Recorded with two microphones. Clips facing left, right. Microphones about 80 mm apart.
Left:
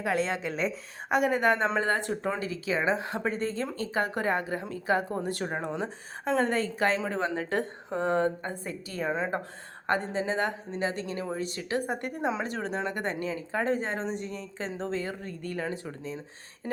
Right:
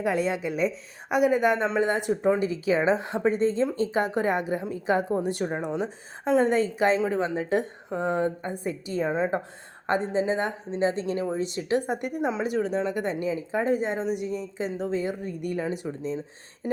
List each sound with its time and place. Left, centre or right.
0.0 s speech: centre
1.8 s speech: centre
12.2 s speech: centre
13.0 s speech: centre